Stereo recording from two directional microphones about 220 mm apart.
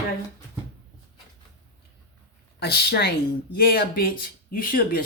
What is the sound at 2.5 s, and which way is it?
Speech, 45° left (ahead or behind).